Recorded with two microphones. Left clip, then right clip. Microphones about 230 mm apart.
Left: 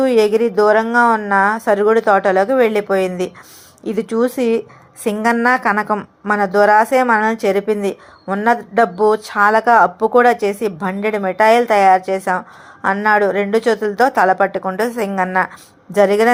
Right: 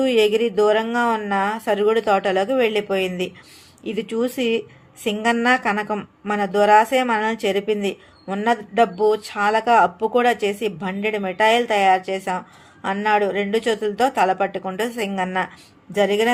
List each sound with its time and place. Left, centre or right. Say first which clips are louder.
0.0 s a woman's voice: left 4 dB; centre